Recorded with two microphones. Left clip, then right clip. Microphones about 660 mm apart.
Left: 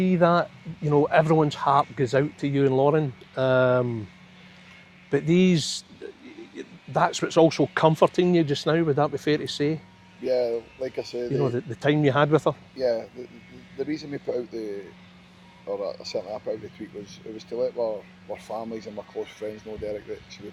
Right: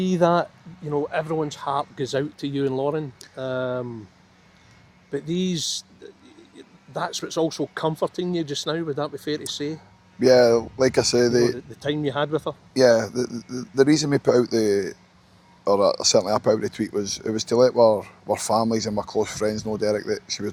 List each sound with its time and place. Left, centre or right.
0.0 s speech: centre
0.9 s speech: left
5.1 s speech: left
10.2 s speech: right
11.5 s speech: left
12.7 s speech: right